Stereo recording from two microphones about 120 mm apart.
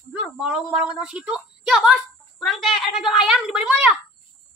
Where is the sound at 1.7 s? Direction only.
Centre (ahead or behind).